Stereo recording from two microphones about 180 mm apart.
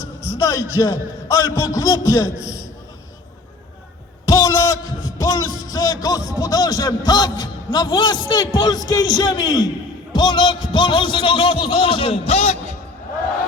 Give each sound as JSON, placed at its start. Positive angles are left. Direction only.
{"t": 0.3, "sound": "a man's voice", "side_deg": 20}
{"t": 4.3, "sound": "a sound", "side_deg": 20}
{"t": 10.1, "sound": "a man's voice", "side_deg": 25}